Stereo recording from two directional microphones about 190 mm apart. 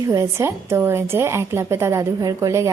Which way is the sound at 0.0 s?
15° right (ahead or behind).